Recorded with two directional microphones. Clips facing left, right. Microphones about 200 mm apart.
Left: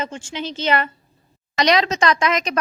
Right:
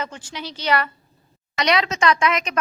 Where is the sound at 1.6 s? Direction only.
35° left (ahead or behind).